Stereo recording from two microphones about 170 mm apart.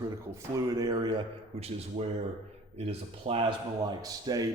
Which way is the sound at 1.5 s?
35° right (ahead or behind).